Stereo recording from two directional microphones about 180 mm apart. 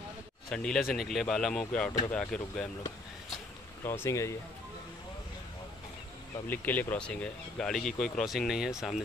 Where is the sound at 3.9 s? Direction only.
15° left (ahead or behind).